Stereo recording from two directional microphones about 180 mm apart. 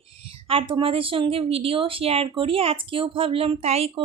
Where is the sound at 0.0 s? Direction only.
30° right (ahead or behind).